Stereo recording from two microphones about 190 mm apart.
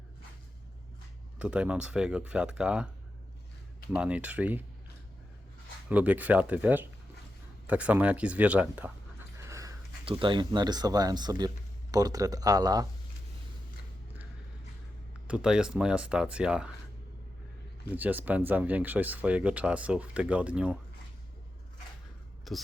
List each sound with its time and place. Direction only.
1.4 s speech: 5° right (ahead or behind)
3.9 s speech: 5° right (ahead or behind)
5.9 s speech: 10° right (ahead or behind)
9.4 s dog: 15° right (ahead or behind)
10.1 s speech: 25° right (ahead or behind)
15.3 s speech: 5° right (ahead or behind)
17.9 s speech: 10° right (ahead or behind)
22.5 s a woman's voice: centre (ahead or behind)